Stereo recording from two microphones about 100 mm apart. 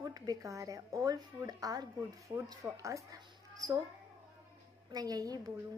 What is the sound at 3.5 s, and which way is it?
Speech, 35° right (ahead or behind).